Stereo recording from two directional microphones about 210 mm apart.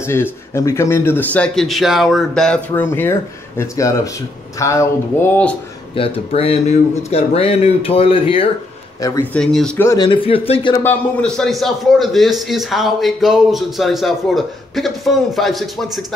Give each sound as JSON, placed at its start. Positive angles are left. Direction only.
{"t": 0.0, "sound": "a man's voice", "side_deg": 10}
{"t": 5.9, "sound": "speech", "side_deg": 25}
{"t": 9.0, "sound": "a man's voice", "side_deg": 10}
{"t": 10.8, "sound": "a man's voice", "side_deg": 10}